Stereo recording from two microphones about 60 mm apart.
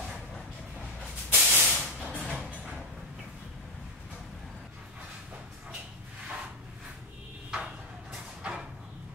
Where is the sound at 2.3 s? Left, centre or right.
Right.